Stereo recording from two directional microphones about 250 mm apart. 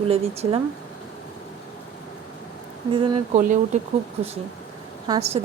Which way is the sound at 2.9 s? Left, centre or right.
Right.